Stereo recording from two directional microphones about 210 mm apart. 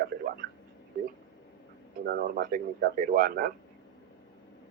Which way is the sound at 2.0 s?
45° right (ahead or behind).